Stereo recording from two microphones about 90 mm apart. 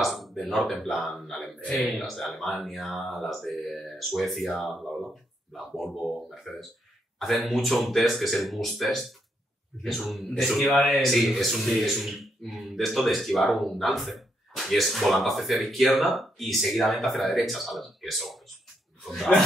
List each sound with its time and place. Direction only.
0.0 s speech: centre (ahead or behind)